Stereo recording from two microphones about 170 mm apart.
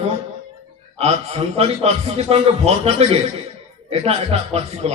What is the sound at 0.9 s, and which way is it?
A man's voice, 35° right (ahead or behind).